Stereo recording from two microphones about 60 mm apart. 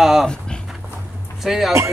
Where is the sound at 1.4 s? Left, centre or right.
Centre.